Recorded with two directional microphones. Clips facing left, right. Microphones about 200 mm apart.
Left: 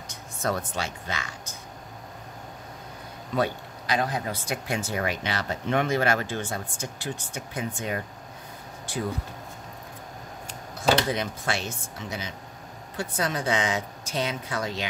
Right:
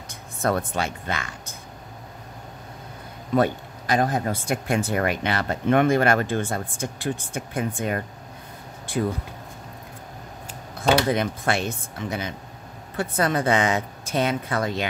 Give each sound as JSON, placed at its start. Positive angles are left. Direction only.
{"t": 0.1, "sound": "speech", "side_deg": -55}
{"t": 3.3, "sound": "speech", "side_deg": -50}
{"t": 10.8, "sound": "speech", "side_deg": -55}